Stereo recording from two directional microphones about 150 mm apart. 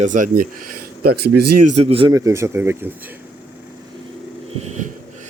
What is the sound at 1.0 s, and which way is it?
Speech, 90° right.